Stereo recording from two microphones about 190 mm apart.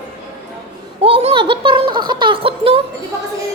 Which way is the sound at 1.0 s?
30° right (ahead or behind).